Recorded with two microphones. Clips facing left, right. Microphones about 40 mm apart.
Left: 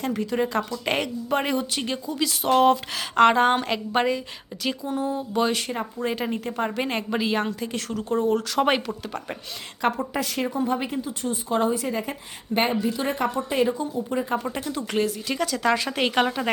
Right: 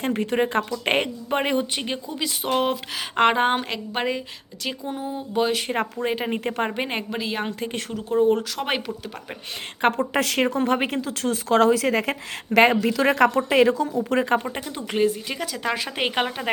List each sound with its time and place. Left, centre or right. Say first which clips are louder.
0.0 s speech: right 2 dB; right; by 3.1 s centre
3.2 s speech: left 2 dB; right
3.6 s a woman's voice: left 3 dB; centre
6.0 s speech: right 1 dB; right
6.3 s a woman's voice: right 2 dB; right
6.7 s speech: even; centre
7.1 s a woman's voice: left 3 dB; centre
7.4 s speech: even; right
7.9 s speech: right 1 dB; centre
8.2 s speech: right 5 dB; right
8.5 s a woman's voice: left 5 dB; centre
10.1 s speech: right 5 dB; right
14.1 s speech: right 6 dB; right
14.6 s speech: right 2 dB; centre